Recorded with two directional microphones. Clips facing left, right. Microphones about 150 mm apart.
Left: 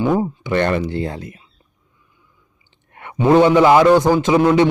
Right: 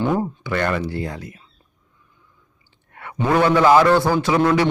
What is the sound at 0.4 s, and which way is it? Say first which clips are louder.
Speech: left 4 dB; 25° left (ahead or behind).